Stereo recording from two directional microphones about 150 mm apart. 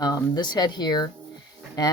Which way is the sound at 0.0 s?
25° left (ahead or behind).